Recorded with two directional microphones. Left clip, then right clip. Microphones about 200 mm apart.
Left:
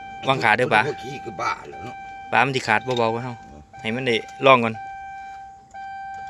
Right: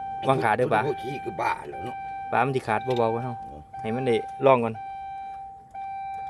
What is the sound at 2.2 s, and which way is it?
Speech, 5° right (ahead or behind).